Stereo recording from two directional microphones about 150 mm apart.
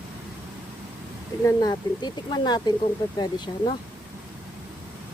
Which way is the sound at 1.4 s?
20° left (ahead or behind).